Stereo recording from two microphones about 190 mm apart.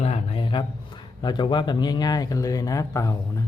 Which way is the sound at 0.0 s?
30° left (ahead or behind).